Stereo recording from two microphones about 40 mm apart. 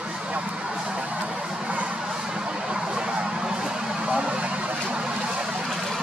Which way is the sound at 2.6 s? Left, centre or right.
Right.